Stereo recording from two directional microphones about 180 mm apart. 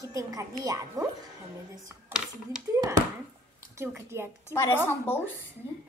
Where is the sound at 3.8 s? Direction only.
15° right (ahead or behind).